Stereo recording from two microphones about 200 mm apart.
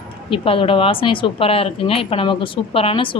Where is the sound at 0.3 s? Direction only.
25° left (ahead or behind).